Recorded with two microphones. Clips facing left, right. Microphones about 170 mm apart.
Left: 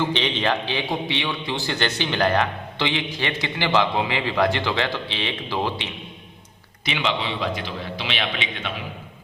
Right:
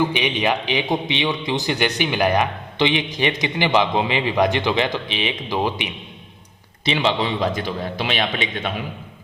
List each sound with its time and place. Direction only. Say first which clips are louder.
0.0 s a man's voice: right 3 dB; 10° right (ahead or behind)
6.8 s a man's voice: right 5 dB; 35° right (ahead or behind)